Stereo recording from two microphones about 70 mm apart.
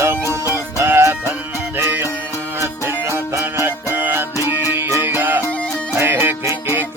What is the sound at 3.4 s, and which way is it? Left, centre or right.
Music, right.